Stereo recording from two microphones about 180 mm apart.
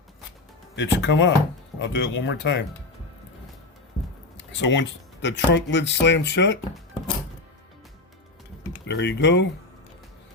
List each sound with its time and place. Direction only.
0.8 s speech: 80° left
4.4 s speech: 85° left
8.9 s speech: 75° left (ahead or behind)